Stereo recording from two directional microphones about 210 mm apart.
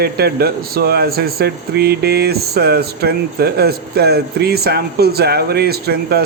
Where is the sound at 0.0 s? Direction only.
50° right (ahead or behind).